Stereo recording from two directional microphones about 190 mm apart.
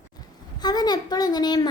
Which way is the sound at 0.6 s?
20° left (ahead or behind).